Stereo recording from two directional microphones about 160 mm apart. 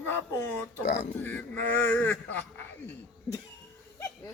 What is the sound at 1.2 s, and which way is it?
A man's voice, 10° left (ahead or behind).